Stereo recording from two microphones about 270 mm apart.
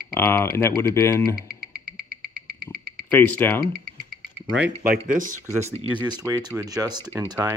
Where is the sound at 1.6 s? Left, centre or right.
Right.